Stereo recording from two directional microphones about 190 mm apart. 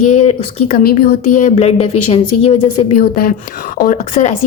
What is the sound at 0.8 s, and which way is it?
A woman's voice, 45° left (ahead or behind).